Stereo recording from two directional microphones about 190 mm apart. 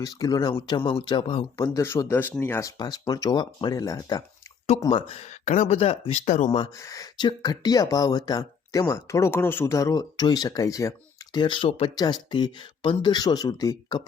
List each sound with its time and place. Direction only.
0.0 s speech: 20° left (ahead or behind); by 6.6 s 40° left (ahead or behind)
6.7 s speech: 15° left (ahead or behind)